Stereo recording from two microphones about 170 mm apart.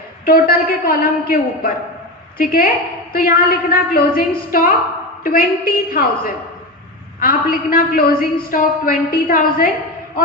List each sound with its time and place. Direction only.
0.3 s a woman's voice: 60° left (ahead or behind)